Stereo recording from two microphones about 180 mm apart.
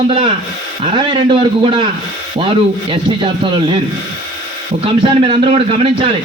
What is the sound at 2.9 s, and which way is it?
Speech, 25° right (ahead or behind).